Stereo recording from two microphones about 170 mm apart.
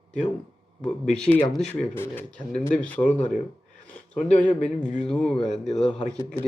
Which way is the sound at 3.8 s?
45° left (ahead or behind).